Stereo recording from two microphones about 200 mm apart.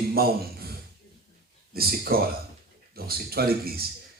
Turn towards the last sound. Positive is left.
turn(degrees=-50)  # may be behind; listen again after turning